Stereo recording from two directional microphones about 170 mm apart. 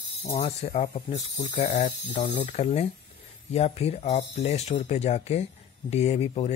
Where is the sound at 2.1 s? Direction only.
30° left (ahead or behind).